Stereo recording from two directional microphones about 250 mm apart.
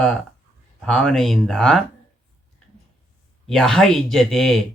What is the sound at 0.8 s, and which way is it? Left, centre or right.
Speech, centre.